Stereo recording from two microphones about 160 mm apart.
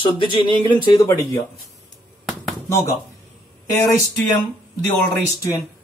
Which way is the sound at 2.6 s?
15° left (ahead or behind).